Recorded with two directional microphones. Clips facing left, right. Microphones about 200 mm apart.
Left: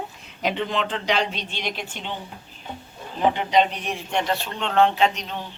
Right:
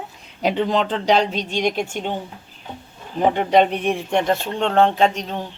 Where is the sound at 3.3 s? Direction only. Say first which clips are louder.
Right 4 dB; 50° right (ahead or behind).